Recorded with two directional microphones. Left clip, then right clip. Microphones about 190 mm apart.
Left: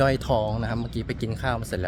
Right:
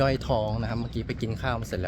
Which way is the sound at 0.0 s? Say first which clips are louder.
Left 3 dB; 10° left (ahead or behind).